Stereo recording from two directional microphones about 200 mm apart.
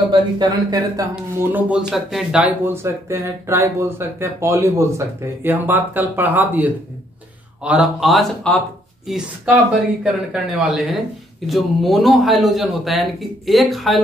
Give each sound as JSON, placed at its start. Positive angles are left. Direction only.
{"t": 0.1, "sound": "speech", "side_deg": -20}
{"t": 1.1, "sound": "a man's voice", "side_deg": -5}
{"t": 10.3, "sound": "a man's voice", "side_deg": 0}